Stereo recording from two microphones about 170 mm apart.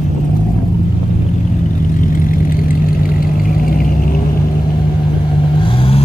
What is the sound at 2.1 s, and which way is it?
Vehicle, 55° left (ahead or behind).